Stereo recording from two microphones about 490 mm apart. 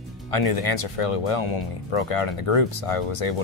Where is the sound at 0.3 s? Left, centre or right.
Left.